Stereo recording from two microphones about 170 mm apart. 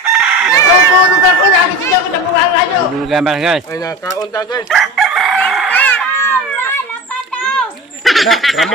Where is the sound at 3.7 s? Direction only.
20° left (ahead or behind).